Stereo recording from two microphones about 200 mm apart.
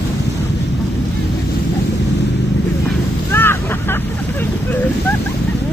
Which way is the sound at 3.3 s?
10° left (ahead or behind).